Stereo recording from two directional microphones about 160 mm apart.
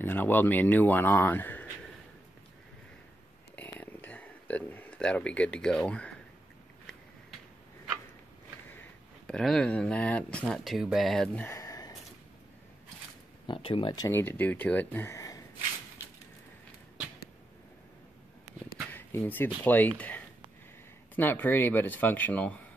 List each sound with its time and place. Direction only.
0.0 s speech: 10° left (ahead or behind)
3.8 s a sound: 10° left (ahead or behind)
9.3 s speech: 5° left (ahead or behind)
11.4 s a sound: 20° left (ahead or behind)
13.5 s speech: 35° left (ahead or behind)
18.9 s speech: 10° left (ahead or behind)
21.1 s speech: 10° left (ahead or behind)